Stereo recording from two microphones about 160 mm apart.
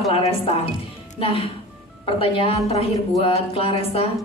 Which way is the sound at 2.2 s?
35° left (ahead or behind).